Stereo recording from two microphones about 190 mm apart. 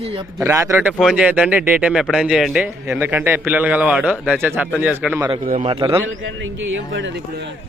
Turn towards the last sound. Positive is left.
turn(degrees=-65)  # may be behind; listen again after turning